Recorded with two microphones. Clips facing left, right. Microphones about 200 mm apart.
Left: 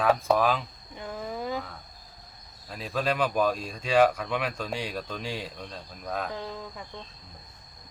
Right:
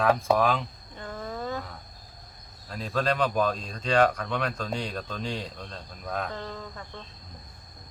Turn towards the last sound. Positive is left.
turn(degrees=10)  # may be behind; listen again after turning